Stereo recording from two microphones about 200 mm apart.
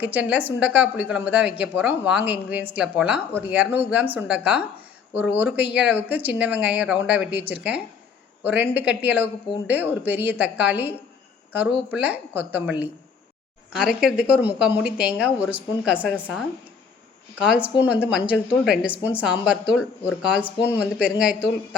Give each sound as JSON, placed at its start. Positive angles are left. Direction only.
{"t": 0.0, "sound": "a woman's voice", "side_deg": -5}
{"t": 13.7, "sound": "speech", "side_deg": -5}
{"t": 17.4, "sound": "speech", "side_deg": -5}